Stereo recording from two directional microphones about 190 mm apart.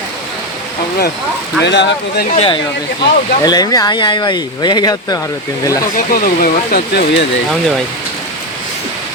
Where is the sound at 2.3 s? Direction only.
30° left (ahead or behind).